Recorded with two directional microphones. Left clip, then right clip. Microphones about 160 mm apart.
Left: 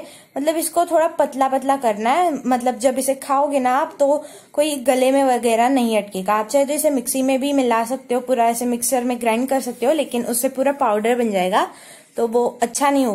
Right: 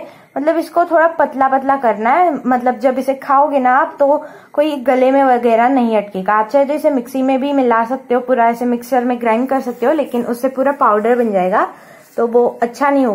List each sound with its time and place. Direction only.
0.3 s a woman's voice: centre (ahead or behind)
10.9 s a woman's voice: 15° left (ahead or behind)
12.2 s a woman's voice: centre (ahead or behind)